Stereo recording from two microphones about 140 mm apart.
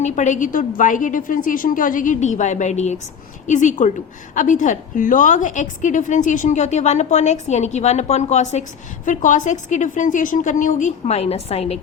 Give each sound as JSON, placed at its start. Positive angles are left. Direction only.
{"t": 0.0, "sound": "a woman's voice", "side_deg": 60}